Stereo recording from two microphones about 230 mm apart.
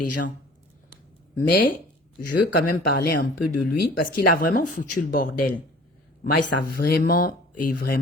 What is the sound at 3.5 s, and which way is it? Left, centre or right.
Speech, left.